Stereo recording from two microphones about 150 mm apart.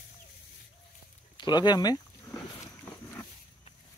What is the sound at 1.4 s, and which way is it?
Speech, 30° left (ahead or behind).